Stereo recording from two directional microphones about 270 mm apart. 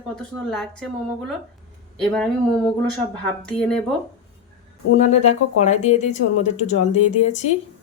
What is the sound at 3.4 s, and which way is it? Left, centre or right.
Speech, centre.